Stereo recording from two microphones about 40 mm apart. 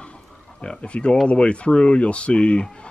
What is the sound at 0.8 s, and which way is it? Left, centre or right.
Speech, left.